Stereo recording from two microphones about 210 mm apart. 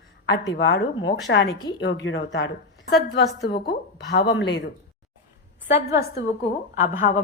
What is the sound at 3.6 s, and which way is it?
Speech, 50° left (ahead or behind).